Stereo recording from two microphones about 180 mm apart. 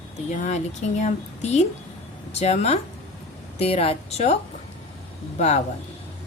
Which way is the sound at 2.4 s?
35° left (ahead or behind).